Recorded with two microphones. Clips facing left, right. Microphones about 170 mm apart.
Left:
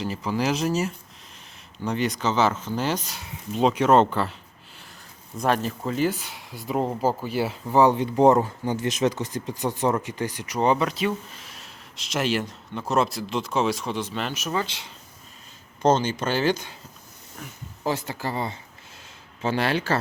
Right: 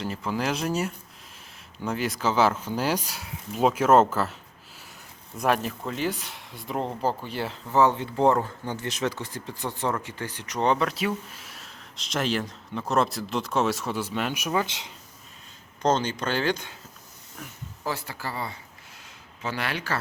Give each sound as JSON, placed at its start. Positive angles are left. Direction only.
{"t": 0.0, "sound": "speech", "side_deg": 0}
{"t": 5.4, "sound": "speech", "side_deg": 0}
{"t": 15.8, "sound": "speech", "side_deg": 5}
{"t": 17.8, "sound": "speech", "side_deg": 20}